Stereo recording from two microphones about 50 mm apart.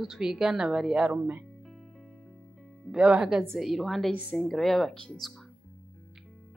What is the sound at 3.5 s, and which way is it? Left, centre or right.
Speech, centre.